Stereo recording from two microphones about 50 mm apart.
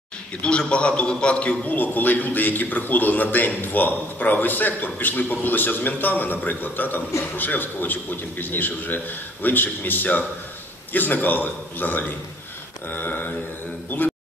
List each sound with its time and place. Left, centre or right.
0.4 s a man's voice: left
1.8 s a man's voice: left